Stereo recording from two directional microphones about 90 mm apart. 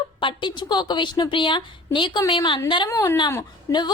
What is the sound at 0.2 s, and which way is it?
A woman's voice, 65° left (ahead or behind).